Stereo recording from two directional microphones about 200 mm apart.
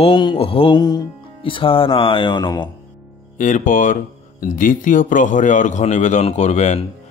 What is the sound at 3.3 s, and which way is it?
Speech, 40° left (ahead or behind).